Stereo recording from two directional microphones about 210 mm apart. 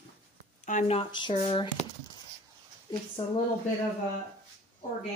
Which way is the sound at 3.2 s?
20° left (ahead or behind).